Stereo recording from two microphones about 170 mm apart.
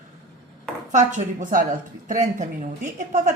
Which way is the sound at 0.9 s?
45° right (ahead or behind).